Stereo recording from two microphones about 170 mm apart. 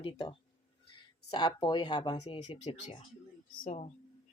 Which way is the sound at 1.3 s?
25° left (ahead or behind).